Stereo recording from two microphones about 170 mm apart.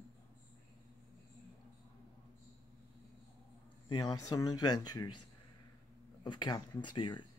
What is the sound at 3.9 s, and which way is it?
Speech, 20° left (ahead or behind).